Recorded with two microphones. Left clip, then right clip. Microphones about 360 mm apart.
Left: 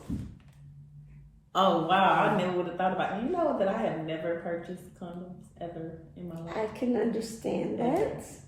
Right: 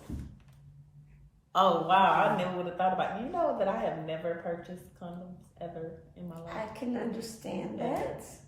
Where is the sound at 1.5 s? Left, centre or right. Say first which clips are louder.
Even; centre.